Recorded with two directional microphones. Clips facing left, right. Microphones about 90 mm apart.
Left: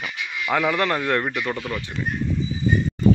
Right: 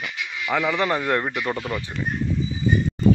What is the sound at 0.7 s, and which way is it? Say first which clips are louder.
A man's voice: even; 10° right (ahead or behind).